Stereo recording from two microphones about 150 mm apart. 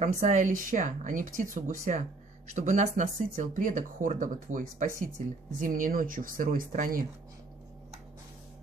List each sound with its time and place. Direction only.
0.0 s speech: 50° right (ahead or behind)